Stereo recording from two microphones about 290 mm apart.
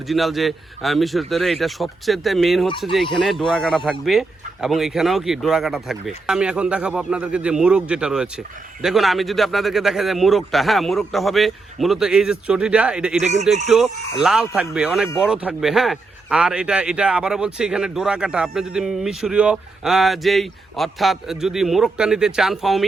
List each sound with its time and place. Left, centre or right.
0.1 s speech: centre
13.2 s speech: right
13.7 s speech: centre